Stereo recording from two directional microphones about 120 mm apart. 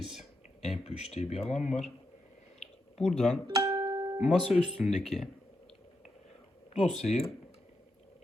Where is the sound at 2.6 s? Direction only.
65° left (ahead or behind).